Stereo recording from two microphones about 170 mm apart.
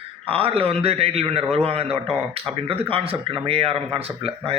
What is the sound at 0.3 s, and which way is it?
Speech, 35° right (ahead or behind).